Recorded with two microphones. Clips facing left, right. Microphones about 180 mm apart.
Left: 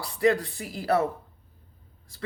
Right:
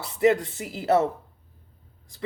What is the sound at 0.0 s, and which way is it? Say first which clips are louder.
Speech: right 2 dB; 20° right (ahead or behind).